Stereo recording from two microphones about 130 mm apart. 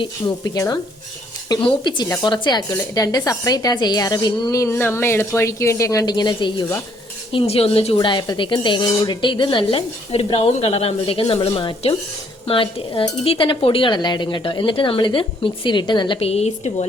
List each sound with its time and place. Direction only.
0.0 s a woman's voice: 30° left (ahead or behind)
1.5 s dishes: 35° left (ahead or behind)
2.9 s a woman's voice: 30° left (ahead or behind)
7.3 s speech: 50° left (ahead or behind)
7.9 s dishes: 35° left (ahead or behind); by 16.8 s 55° left (ahead or behind)